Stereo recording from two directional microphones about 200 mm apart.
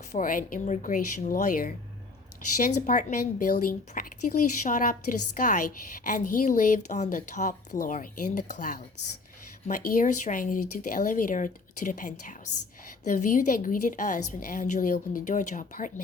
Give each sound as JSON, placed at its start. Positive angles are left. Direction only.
{"t": 0.1, "sound": "a woman's voice", "side_deg": 40}